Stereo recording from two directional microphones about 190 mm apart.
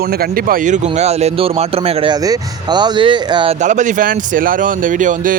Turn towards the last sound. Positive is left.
turn(degrees=-45)  # may be behind; listen again after turning